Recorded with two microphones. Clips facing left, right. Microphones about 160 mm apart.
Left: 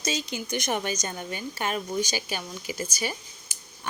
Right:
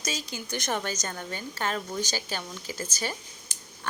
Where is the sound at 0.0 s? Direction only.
25° left (ahead or behind).